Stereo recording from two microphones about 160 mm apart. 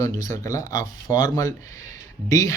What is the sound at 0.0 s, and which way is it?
A man's voice, 20° left (ahead or behind).